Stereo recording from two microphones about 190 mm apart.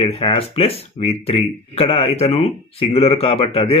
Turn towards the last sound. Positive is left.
turn(degrees=30)  # may be behind; listen again after turning